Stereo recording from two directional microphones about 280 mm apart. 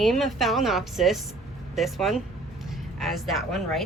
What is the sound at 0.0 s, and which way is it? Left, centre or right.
Speech, centre.